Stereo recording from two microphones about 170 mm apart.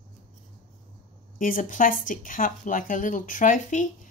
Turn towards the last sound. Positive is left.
turn(degrees=50)  # may be behind; listen again after turning